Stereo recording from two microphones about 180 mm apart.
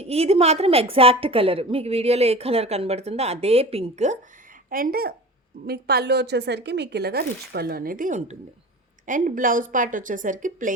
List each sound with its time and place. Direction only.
0.0 s a woman's voice: 35° right (ahead or behind)
4.7 s a woman's voice: 55° right (ahead or behind)